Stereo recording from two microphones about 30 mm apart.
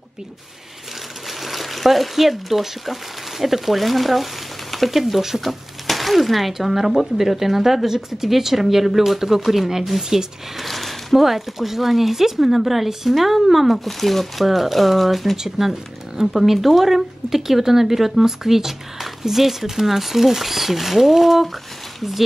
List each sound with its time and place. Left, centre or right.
1.4 s speech: centre
10.6 s a sound: centre
11.2 s speech: centre
13.8 s speech: centre
15.3 s speech: centre